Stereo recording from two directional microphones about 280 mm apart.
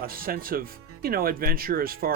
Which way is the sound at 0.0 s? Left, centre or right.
Right.